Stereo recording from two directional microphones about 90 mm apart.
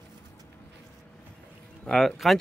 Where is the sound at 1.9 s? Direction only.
Centre (ahead or behind).